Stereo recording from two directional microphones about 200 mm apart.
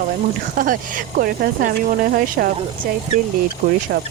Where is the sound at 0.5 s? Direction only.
45° right (ahead or behind).